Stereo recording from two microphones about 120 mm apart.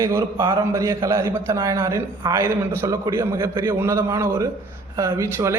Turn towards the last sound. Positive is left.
turn(degrees=-25)  # may be behind; listen again after turning